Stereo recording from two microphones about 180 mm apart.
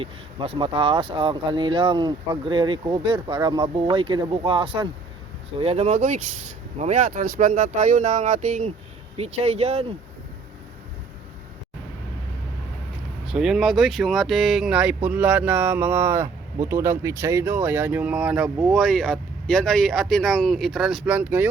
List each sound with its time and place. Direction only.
0.0 s speech: 30° right (ahead or behind)
13.2 s speech: 5° right (ahead or behind)